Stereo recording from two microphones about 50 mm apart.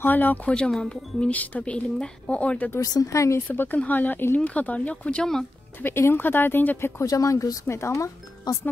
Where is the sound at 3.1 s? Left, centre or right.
Left.